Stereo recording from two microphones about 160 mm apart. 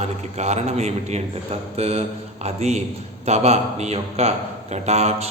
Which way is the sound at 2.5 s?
45° right (ahead or behind).